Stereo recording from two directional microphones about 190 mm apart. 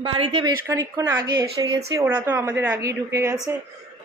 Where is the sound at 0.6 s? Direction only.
15° right (ahead or behind).